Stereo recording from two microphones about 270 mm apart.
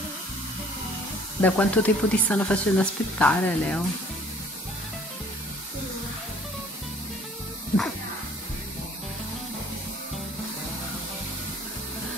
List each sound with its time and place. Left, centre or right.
1.4 s speech: centre